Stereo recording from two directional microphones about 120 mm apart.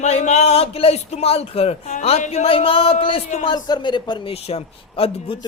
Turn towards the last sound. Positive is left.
turn(degrees=55)  # may be behind; listen again after turning